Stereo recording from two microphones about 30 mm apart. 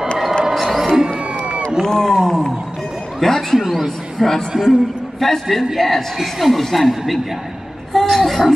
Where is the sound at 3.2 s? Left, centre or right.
Centre.